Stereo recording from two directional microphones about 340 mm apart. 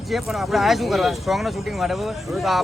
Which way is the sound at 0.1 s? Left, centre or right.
Centre.